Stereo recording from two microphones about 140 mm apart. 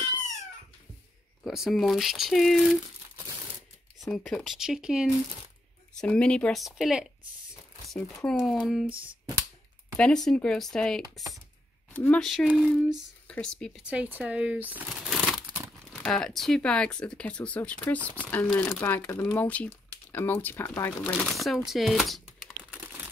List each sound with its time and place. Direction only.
1.4 s speech: centre (ahead or behind)
4.1 s speech: 5° left (ahead or behind)
5.9 s speech: 5° left (ahead or behind)
9.9 s speech: 5° left (ahead or behind)
12.4 s speech: centre (ahead or behind)
13.8 s speech: 10° right (ahead or behind); by 20.9 s 20° left (ahead or behind)
21.0 s speech: centre (ahead or behind)